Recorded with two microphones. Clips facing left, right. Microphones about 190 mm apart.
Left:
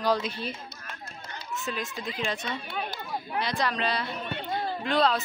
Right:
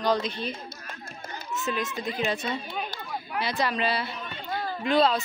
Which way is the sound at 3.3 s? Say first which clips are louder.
Right 2 dB; 5° right (ahead or behind).